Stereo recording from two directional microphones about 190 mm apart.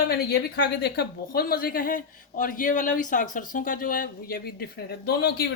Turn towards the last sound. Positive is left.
turn(degrees=55)  # may be behind; listen again after turning